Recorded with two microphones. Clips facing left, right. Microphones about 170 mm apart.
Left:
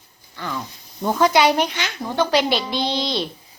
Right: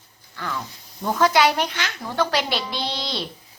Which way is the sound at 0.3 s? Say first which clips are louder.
Left 1 dB; 15° left (ahead or behind).